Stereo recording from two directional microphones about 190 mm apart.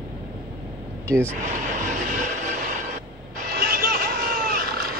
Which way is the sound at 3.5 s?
55° right (ahead or behind).